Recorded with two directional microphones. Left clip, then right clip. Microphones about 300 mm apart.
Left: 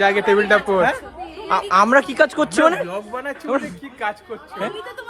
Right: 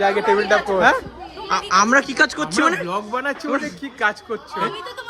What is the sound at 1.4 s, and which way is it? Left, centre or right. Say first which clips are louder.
Speech: left 1 dB; centre.